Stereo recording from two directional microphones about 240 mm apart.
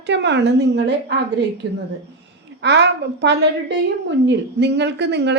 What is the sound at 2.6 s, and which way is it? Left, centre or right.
A woman's voice, right.